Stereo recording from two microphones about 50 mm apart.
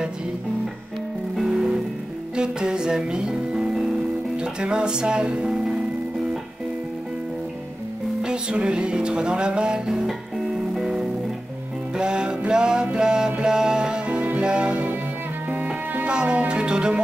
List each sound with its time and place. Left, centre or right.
1.3 s music: centre
4.4 s speech: centre
8.2 s music: centre
9.8 s music: centre; by 14.9 s right
15.5 s music: right
16.1 s music: right